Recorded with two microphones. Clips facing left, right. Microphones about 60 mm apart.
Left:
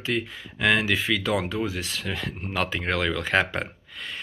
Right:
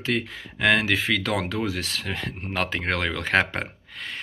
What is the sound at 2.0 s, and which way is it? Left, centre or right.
Speech, right.